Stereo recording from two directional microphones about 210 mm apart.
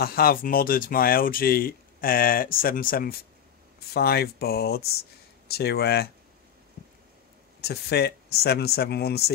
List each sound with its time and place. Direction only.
0.0 s speech: 45° left (ahead or behind)
7.6 s speech: 50° left (ahead or behind)